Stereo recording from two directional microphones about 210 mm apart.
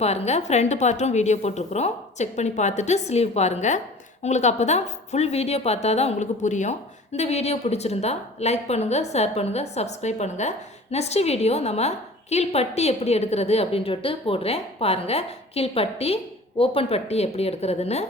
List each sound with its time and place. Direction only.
0.0 s a woman's voice: 30° left (ahead or behind)